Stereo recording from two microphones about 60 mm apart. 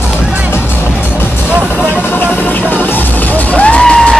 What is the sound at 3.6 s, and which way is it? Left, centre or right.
Music, centre.